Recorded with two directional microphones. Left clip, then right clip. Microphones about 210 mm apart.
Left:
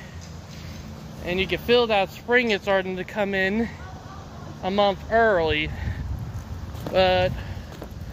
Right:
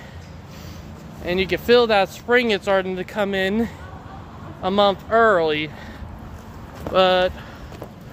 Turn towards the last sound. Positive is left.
turn(degrees=-20)  # may be behind; listen again after turning